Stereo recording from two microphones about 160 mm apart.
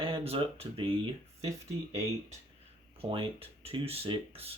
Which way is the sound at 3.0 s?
35° right (ahead or behind).